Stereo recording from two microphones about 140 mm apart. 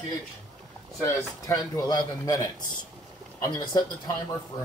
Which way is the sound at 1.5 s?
30° left (ahead or behind).